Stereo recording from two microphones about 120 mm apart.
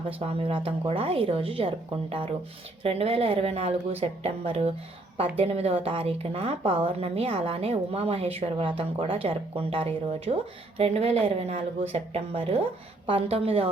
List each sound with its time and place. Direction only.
0.2 s a woman's voice: 50° right (ahead or behind)